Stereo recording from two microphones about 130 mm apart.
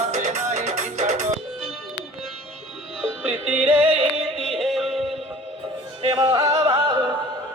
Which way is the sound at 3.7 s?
50° right (ahead or behind).